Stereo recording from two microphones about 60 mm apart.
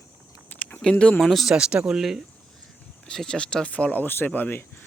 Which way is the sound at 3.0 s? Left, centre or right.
Centre.